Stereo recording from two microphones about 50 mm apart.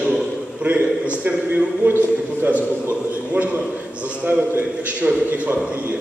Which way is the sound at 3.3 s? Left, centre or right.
Right.